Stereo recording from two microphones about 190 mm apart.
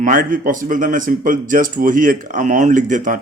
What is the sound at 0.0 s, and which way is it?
Speech, 45° right (ahead or behind).